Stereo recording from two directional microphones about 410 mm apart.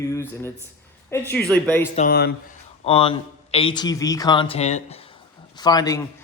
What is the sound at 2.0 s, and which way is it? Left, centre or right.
Speech, left.